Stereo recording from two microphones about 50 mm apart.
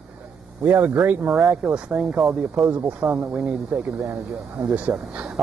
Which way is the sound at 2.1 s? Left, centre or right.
Centre.